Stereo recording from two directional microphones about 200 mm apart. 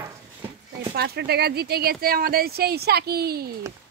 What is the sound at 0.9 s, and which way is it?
Speech, 55° right (ahead or behind).